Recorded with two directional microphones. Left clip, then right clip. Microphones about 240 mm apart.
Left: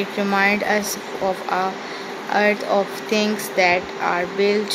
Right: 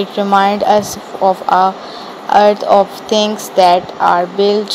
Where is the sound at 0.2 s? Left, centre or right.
Centre.